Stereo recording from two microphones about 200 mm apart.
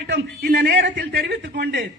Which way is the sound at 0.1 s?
55° right (ahead or behind).